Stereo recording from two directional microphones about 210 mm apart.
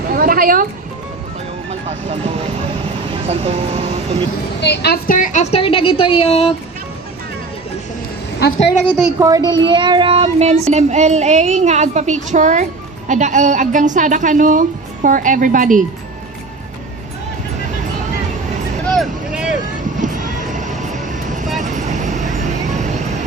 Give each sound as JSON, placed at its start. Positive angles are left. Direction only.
{"t": 0.1, "sound": "a sound", "side_deg": -45}
{"t": 3.2, "sound": "speech", "side_deg": -30}
{"t": 4.6, "sound": "a woman's voice", "side_deg": 50}
{"t": 9.1, "sound": "speech", "side_deg": -15}
{"t": 18.9, "sound": "vehicle", "side_deg": 0}
{"t": 20.0, "sound": "vehicle", "side_deg": -35}